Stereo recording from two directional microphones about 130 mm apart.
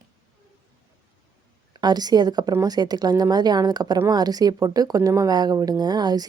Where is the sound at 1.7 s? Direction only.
35° right (ahead or behind).